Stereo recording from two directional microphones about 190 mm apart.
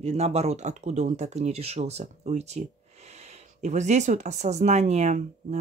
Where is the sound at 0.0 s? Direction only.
35° right (ahead or behind).